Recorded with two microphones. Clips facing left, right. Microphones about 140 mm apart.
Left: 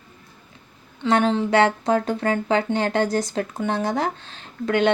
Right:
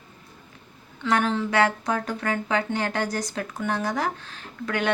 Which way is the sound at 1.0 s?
25° left (ahead or behind).